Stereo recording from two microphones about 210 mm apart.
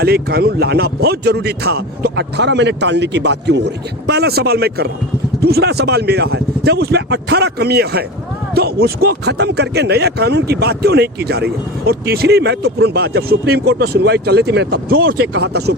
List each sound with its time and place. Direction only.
0.0 s speech: 50° right (ahead or behind)